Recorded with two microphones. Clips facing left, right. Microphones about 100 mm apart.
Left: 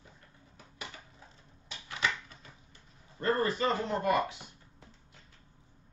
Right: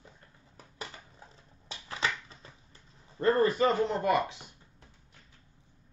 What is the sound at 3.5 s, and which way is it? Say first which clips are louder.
Speech: right 4 dB; 25° right (ahead or behind).